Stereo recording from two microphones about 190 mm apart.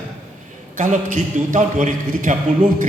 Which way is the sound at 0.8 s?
45° right (ahead or behind).